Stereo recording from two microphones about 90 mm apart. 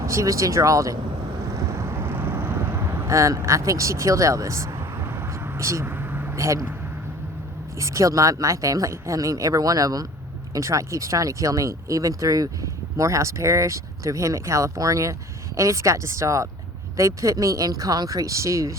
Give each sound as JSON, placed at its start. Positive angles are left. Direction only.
{"t": 0.0, "sound": "speech", "side_deg": -35}
{"t": 1.8, "sound": "vehicle", "side_deg": -30}
{"t": 3.1, "sound": "speech", "side_deg": -35}
{"t": 5.8, "sound": "vehicle", "side_deg": -20}
{"t": 6.3, "sound": "speech", "side_deg": -35}
{"t": 7.8, "sound": "speech", "side_deg": -35}